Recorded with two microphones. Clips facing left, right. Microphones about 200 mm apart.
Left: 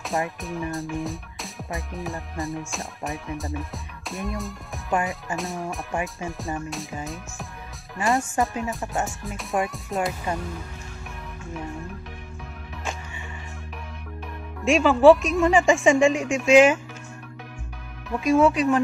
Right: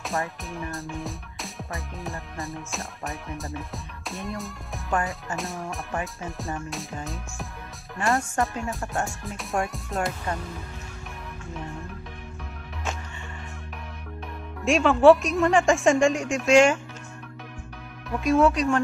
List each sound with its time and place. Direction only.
0.1 s speech: 15° left (ahead or behind)
0.7 s music: centre (ahead or behind)
14.6 s music: centre (ahead or behind)
18.1 s music: centre (ahead or behind)